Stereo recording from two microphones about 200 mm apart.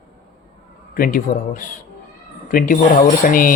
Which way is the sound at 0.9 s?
45° left (ahead or behind).